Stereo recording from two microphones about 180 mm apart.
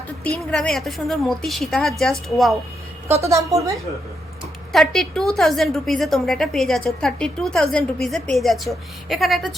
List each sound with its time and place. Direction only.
0.3 s a woman's voice: 5° left (ahead or behind)
3.1 s a woman's voice: 15° right (ahead or behind)
4.7 s a woman's voice: centre (ahead or behind)